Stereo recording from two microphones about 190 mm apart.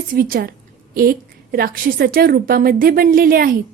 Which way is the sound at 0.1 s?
50° right (ahead or behind).